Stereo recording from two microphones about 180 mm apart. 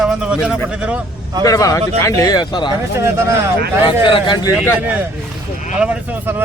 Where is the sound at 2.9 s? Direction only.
15° right (ahead or behind).